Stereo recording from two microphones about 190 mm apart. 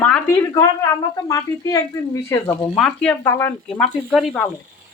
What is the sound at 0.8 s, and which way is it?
Speech, 20° left (ahead or behind).